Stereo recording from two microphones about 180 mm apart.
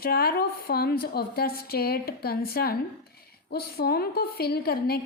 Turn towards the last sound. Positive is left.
turn(degrees=60)  # may be behind; listen again after turning